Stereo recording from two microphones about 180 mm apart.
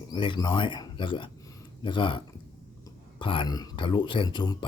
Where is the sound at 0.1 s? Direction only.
25° left (ahead or behind).